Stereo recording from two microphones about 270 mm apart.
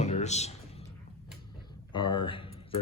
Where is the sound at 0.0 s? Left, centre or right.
Left.